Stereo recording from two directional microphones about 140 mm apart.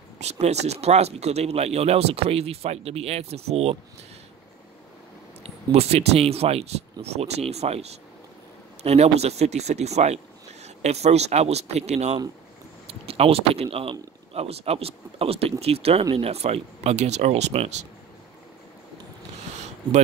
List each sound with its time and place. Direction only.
0.2 s speech: 50° right (ahead or behind)
5.4 s speech: 50° right (ahead or behind)